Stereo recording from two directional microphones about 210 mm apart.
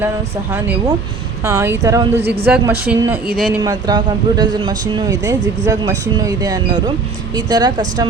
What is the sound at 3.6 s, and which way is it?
Speech, 20° right (ahead or behind).